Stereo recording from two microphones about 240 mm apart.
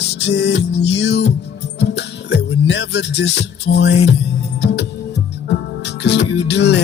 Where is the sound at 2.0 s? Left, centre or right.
Left.